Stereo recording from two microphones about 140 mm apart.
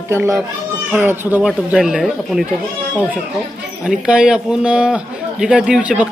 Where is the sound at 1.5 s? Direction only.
5° right (ahead or behind).